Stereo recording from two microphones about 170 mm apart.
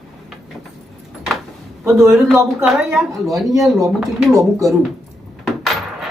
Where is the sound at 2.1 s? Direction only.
Centre (ahead or behind).